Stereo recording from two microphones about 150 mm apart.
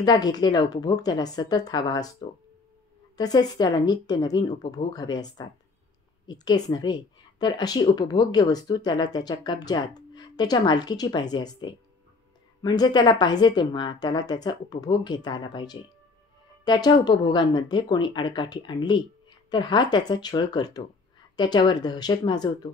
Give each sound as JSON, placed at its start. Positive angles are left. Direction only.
{"t": 0.0, "sound": "speech", "side_deg": 25}
{"t": 3.2, "sound": "a woman's voice", "side_deg": 25}